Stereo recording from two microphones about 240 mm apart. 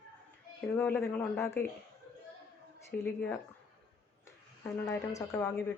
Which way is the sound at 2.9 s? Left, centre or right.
Left.